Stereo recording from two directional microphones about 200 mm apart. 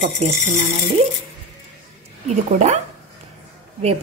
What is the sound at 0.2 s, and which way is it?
Speech, 35° right (ahead or behind).